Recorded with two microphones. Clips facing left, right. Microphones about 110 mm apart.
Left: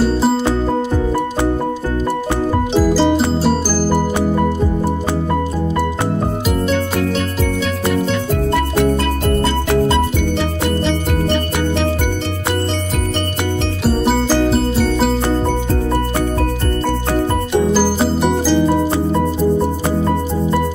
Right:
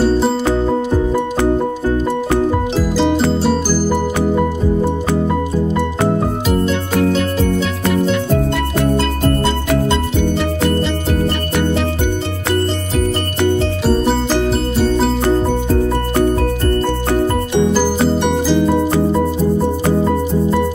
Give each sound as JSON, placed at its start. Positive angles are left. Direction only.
{"t": 2.7, "sound": "music", "side_deg": 0}
{"t": 13.8, "sound": "music", "side_deg": 5}
{"t": 17.7, "sound": "music", "side_deg": 5}